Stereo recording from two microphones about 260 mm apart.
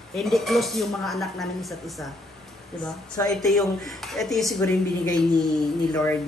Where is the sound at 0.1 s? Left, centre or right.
Centre.